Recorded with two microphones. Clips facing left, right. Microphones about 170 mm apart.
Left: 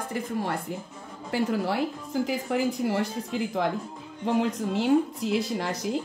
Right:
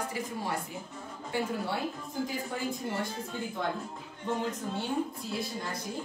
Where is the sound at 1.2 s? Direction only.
85° left.